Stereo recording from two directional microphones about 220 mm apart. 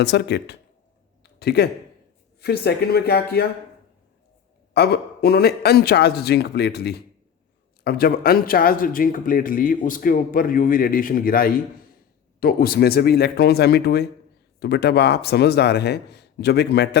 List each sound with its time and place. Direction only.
0.0 s speech: 50° left (ahead or behind)
1.2 s a sound: 45° left (ahead or behind)
2.4 s speech: 45° left (ahead or behind)
4.7 s speech: 45° left (ahead or behind)